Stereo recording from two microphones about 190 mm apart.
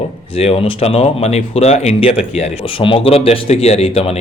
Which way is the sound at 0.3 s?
30° left (ahead or behind).